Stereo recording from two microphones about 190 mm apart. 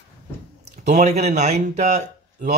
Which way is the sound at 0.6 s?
35° right (ahead or behind).